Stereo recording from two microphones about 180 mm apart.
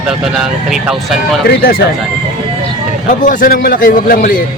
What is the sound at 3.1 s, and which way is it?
A man's voice, 45° left (ahead or behind).